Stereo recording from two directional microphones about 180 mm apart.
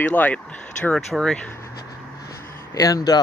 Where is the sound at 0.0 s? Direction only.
10° left (ahead or behind).